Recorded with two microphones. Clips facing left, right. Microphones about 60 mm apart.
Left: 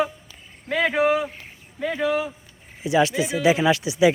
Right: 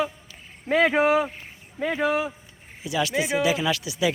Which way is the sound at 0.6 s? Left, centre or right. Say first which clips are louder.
Right 1 dB; centre.